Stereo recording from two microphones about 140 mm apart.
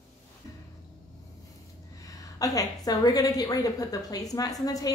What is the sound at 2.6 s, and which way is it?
A woman's voice, 25° left (ahead or behind).